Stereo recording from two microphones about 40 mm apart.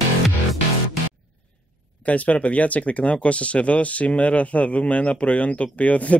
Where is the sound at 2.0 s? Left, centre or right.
Left.